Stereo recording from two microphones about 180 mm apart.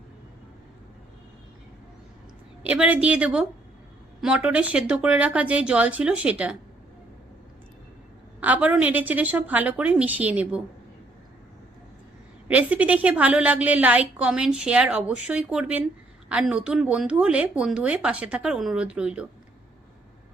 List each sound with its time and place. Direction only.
2.6 s a woman's voice: 10° right (ahead or behind)
8.4 s a woman's voice: 10° right (ahead or behind)
12.5 s a woman's voice: 10° right (ahead or behind)